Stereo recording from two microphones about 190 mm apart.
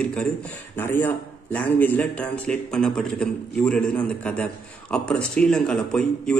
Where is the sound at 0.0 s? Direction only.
5° left (ahead or behind).